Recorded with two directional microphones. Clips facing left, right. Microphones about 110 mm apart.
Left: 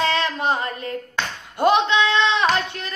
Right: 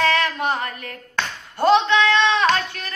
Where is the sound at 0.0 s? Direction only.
20° left (ahead or behind).